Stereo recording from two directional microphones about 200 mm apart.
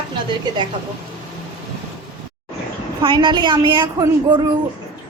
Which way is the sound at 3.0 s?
25° right (ahead or behind).